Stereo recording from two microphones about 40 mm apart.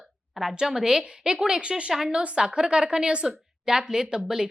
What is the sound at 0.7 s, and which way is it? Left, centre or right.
A woman's voice, centre.